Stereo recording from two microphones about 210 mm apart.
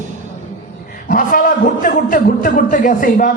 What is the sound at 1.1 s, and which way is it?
A man's voice, 40° left (ahead or behind).